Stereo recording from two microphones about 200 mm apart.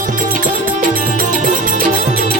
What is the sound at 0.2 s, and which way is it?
Music, 45° right (ahead or behind).